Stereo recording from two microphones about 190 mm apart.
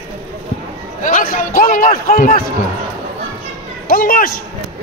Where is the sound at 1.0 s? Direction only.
45° left (ahead or behind).